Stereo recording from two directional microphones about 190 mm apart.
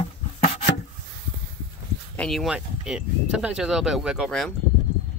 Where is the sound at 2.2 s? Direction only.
Centre (ahead or behind).